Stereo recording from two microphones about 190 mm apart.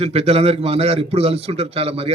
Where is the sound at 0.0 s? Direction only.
35° right (ahead or behind).